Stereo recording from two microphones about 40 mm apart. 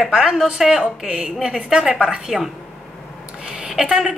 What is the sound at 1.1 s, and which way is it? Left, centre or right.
A woman's voice, centre.